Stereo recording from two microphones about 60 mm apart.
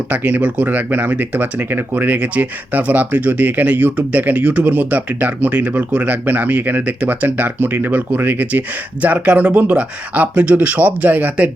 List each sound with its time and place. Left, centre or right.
0.1 s speech: right